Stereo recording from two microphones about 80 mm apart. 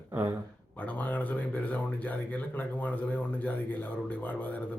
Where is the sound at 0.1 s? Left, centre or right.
Right.